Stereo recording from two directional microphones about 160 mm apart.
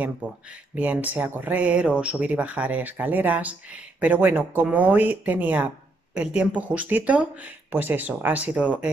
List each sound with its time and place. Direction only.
0.0 s speech: 10° right (ahead or behind)